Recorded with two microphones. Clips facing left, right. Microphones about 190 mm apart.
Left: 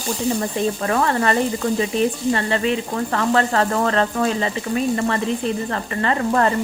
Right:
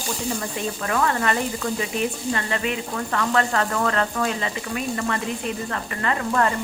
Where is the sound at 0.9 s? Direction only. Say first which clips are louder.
Left 1 dB; 35° left (ahead or behind).